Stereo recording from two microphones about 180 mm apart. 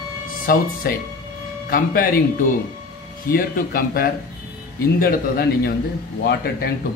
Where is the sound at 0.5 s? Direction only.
55° left (ahead or behind).